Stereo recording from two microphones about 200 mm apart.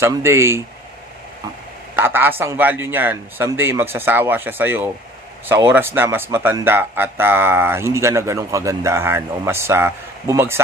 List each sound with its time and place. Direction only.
0.0 s speech: 15° right (ahead or behind)
2.0 s speech: 10° right (ahead or behind)